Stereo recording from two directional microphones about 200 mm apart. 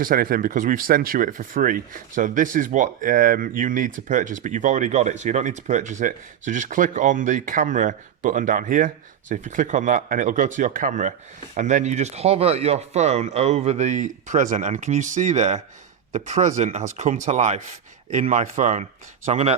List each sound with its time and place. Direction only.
0.0 s speech: 45° right (ahead or behind)